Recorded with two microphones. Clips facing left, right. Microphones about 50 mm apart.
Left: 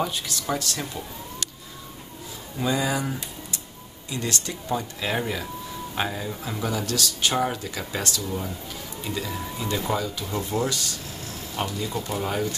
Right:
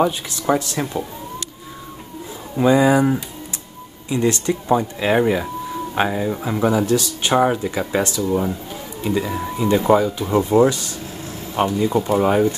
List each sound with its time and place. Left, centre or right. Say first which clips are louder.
0.0 s speech: right 9 dB; right
2.5 s speech: right 11 dB; right